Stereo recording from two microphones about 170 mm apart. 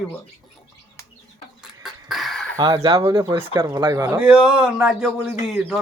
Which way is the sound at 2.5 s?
25° right (ahead or behind).